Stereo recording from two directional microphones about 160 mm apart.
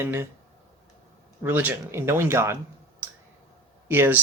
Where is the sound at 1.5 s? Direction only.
15° right (ahead or behind).